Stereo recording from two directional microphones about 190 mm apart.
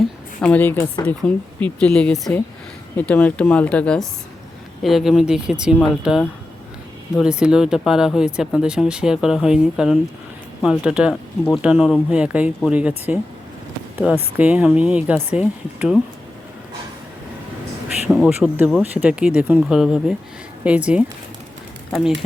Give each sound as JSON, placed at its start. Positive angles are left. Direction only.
{"t": 0.4, "sound": "speech", "side_deg": 10}
{"t": 14.0, "sound": "speech", "side_deg": -5}
{"t": 18.1, "sound": "speech", "side_deg": -5}